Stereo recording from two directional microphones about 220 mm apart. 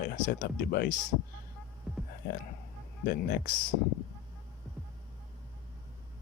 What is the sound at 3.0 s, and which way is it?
Speech, 45° left (ahead or behind).